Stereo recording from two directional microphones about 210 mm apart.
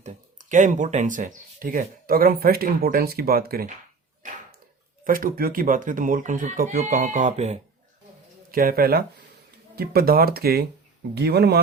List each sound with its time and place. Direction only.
0.0 s speech: 35° right (ahead or behind)
5.0 s speech: 40° right (ahead or behind)
8.4 s speech: 45° right (ahead or behind)